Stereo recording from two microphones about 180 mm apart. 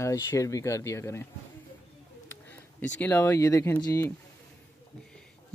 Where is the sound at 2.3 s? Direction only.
10° left (ahead or behind).